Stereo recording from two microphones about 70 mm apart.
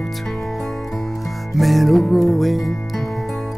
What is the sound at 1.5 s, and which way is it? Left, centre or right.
Music, centre.